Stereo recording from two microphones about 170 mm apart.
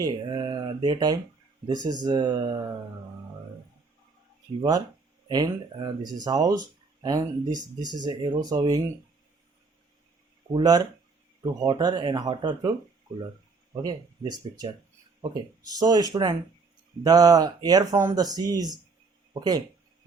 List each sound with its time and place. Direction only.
0.0 s speech: 25° right (ahead or behind)
5.3 s speech: 25° right (ahead or behind)
10.5 s speech: 25° right (ahead or behind)
13.8 s speech: 25° right (ahead or behind)
15.8 s speech: 25° right (ahead or behind)